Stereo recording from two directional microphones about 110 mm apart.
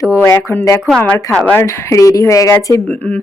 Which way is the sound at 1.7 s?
30° left (ahead or behind).